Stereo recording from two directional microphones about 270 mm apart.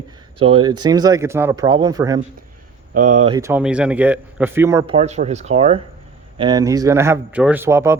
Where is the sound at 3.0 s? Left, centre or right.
Right.